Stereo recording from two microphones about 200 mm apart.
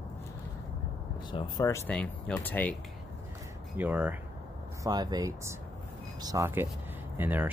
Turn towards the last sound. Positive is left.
turn(degrees=-10)  # may be behind; listen again after turning